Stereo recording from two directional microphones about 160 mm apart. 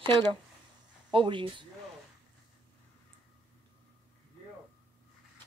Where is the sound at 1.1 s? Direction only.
30° right (ahead or behind).